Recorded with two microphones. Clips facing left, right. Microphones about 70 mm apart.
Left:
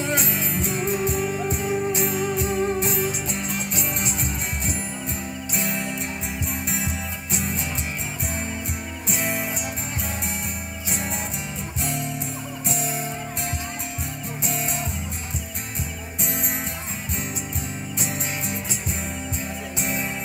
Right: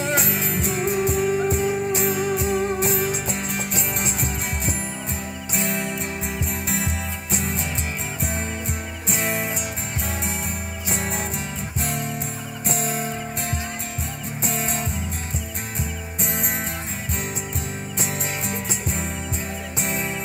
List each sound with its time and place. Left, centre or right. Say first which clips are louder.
0.0 s music: right 2 dB; centre
3.3 s music: right 1 dB; right
9.1 s music: right 2 dB; right